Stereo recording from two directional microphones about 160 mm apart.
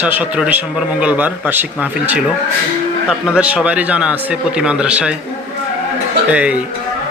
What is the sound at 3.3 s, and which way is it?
A man's voice, 5° right (ahead or behind).